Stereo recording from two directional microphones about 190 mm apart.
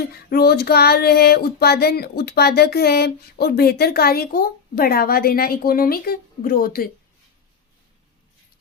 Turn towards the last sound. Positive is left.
turn(degrees=50)  # may be behind; listen again after turning